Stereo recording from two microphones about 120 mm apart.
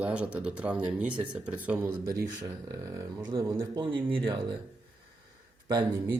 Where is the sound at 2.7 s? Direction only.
25° right (ahead or behind); by 4.5 s 45° right (ahead or behind).